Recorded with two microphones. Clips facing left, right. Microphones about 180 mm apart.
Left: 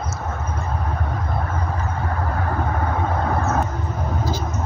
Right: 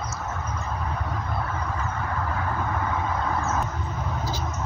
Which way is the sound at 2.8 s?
55° left (ahead or behind).